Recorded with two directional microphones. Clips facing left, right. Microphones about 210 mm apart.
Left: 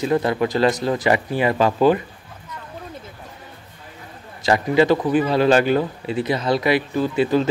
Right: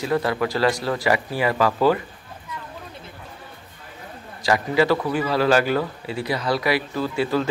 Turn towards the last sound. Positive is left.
turn(degrees=20)  # may be behind; listen again after turning